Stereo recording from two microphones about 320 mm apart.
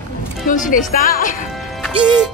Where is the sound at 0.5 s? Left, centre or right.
Left.